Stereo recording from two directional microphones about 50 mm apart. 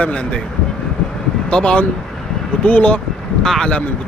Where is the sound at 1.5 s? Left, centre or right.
Centre.